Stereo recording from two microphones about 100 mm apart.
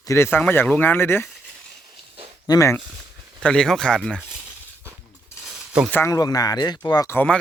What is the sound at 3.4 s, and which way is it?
Speech, 5° left (ahead or behind).